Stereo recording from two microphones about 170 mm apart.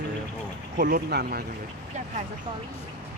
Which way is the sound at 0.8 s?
60° right (ahead or behind).